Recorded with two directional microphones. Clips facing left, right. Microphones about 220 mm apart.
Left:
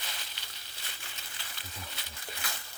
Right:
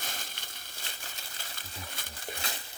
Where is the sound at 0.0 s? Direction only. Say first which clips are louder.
Right 3 dB; 50° right (ahead or behind).